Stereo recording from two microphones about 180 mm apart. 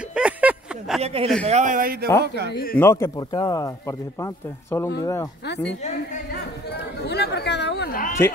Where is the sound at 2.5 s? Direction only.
55° left (ahead or behind).